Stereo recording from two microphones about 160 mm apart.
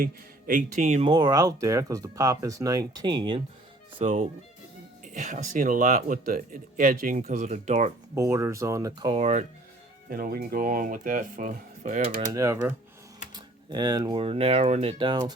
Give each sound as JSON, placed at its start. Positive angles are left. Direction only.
{"t": 0.0, "sound": "speech", "side_deg": -55}
{"t": 1.0, "sound": "speech", "side_deg": -30}
{"t": 3.9, "sound": "speech", "side_deg": -45}
{"t": 5.1, "sound": "speech", "side_deg": -55}
{"t": 8.1, "sound": "speech", "side_deg": -20}
{"t": 9.1, "sound": "speech", "side_deg": -40}
{"t": 10.1, "sound": "speech", "side_deg": -65}
{"t": 12.3, "sound": "speech", "side_deg": -20}